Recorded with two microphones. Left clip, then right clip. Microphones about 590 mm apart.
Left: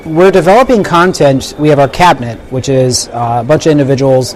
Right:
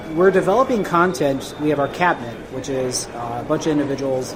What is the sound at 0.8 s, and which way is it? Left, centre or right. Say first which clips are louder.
Speech: left 10 dB; left.